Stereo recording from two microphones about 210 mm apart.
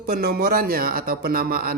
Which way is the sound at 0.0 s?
45° right (ahead or behind).